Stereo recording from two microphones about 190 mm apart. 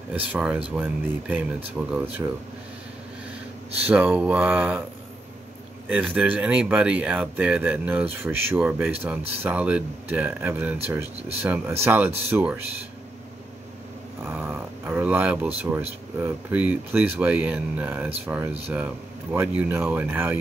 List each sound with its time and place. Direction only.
0.1 s speech: 10° right (ahead or behind)
3.9 s speech: 5° right (ahead or behind)
5.9 s speech: 10° right (ahead or behind)
14.2 s speech: 15° right (ahead or behind)